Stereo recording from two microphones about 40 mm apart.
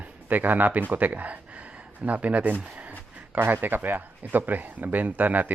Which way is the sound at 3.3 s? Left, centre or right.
Right.